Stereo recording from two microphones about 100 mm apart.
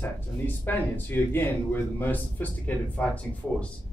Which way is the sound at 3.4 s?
10° left (ahead or behind).